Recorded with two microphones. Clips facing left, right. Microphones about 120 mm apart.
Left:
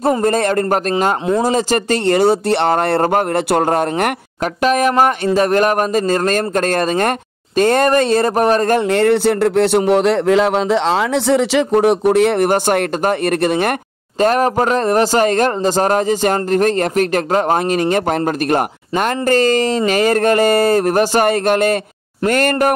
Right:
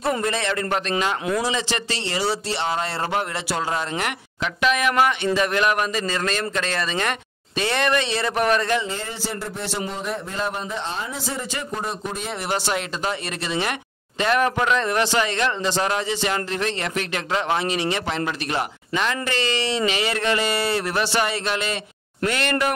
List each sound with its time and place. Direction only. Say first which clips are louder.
0.0 s a man's voice: left 9 dB; 40° left (ahead or behind)
4.6 s a man's voice: left 6 dB; 40° left (ahead or behind)
14.2 s a man's voice: left 7 dB; 40° left (ahead or behind)